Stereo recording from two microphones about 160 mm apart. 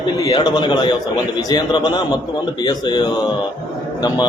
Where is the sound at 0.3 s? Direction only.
30° left (ahead or behind).